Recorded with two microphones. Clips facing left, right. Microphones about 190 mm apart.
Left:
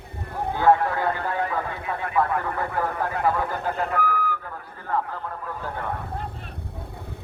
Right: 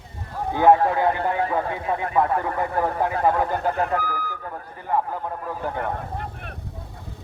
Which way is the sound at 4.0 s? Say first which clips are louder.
Left 4 dB; 35° right (ahead or behind).